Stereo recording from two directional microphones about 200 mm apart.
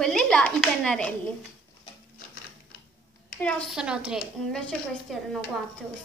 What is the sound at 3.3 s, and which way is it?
Speech, 5° left (ahead or behind).